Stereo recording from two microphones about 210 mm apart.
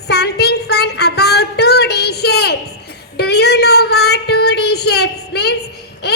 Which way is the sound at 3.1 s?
50° left (ahead or behind).